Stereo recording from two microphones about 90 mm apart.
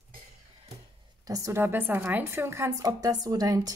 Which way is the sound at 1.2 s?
40° right (ahead or behind).